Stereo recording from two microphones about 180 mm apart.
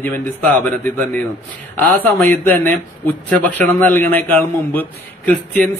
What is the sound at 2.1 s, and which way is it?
Speech, 5° left (ahead or behind).